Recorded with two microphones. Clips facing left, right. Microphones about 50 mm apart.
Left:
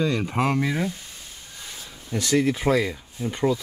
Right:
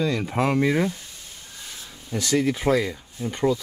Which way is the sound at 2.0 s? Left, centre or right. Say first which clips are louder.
Left 1 dB; centre.